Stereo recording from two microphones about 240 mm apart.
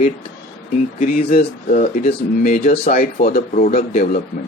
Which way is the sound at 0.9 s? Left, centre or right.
Left.